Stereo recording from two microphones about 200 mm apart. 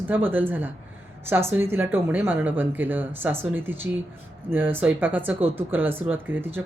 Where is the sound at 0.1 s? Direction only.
10° right (ahead or behind).